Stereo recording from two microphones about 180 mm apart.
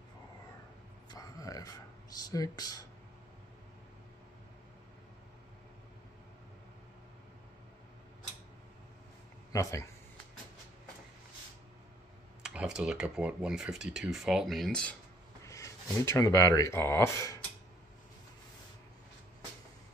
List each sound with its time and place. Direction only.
1.1 s a sound: 20° left (ahead or behind)
9.5 s speech: 15° left (ahead or behind)
12.4 s speech: 5° right (ahead or behind)
15.4 s speech: 15° left (ahead or behind)